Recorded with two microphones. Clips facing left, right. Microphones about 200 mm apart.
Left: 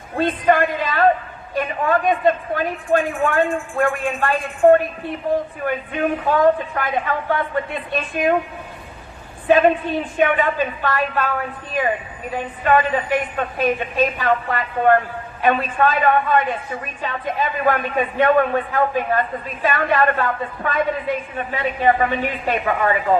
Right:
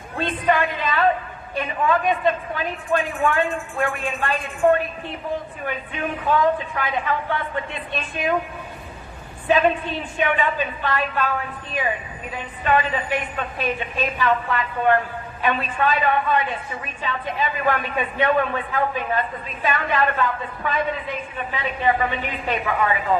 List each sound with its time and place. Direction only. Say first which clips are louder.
0.2 s a woman's voice: left 4 dB; 50° left (ahead or behind)
10.2 s a woman's voice: left 4 dB; 45° left (ahead or behind)